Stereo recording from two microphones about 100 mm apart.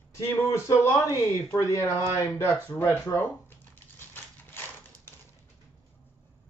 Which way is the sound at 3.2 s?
20° left (ahead or behind).